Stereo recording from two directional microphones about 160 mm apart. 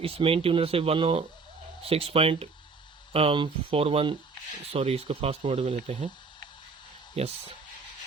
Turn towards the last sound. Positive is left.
turn(degrees=-40)  # may be behind; listen again after turning